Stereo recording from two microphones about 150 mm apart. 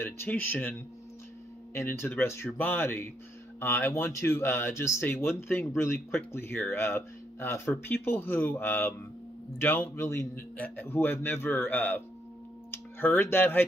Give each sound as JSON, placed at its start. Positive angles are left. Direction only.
{"t": 0.0, "sound": "speech", "side_deg": 15}